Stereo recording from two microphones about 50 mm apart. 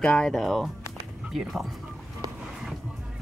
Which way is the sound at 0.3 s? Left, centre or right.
Centre.